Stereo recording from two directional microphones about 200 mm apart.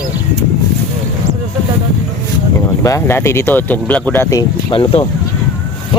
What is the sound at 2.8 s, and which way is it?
Speech, 15° left (ahead or behind).